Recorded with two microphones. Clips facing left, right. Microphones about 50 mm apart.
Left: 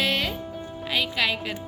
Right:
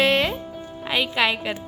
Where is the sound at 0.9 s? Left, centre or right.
Right.